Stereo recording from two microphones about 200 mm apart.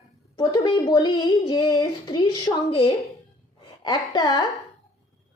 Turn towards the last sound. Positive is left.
turn(degrees=20)  # may be behind; listen again after turning